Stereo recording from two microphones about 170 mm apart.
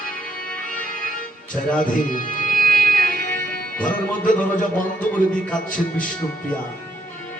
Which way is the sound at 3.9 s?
50° left (ahead or behind).